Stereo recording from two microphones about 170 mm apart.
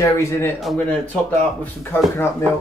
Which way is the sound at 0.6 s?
5° left (ahead or behind).